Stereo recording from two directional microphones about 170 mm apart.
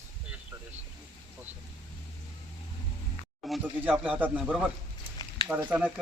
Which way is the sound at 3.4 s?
Centre (ahead or behind).